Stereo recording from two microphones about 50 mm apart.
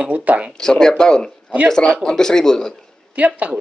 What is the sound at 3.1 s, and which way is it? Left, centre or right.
Speech, right.